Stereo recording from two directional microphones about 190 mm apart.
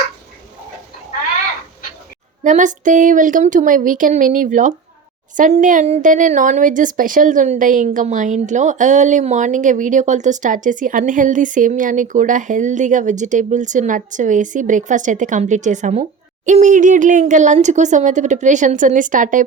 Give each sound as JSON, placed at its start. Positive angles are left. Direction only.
{"t": 2.4, "sound": "speech", "side_deg": -40}